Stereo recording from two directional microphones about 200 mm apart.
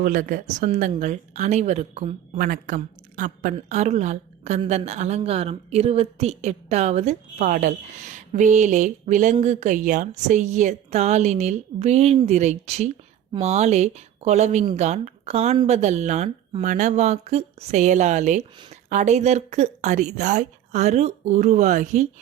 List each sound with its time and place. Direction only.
0.0 s a woman's voice: 40° right (ahead or behind)